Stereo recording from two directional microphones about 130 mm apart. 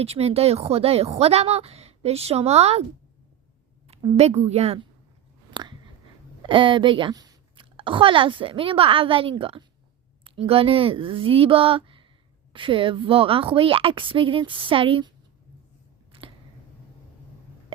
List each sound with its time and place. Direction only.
0.0 s a woman's voice: 50° right (ahead or behind)
4.2 s a woman's voice: 55° right (ahead or behind)
5.5 s a sound: 35° right (ahead or behind)
6.4 s a woman's voice: 40° right (ahead or behind)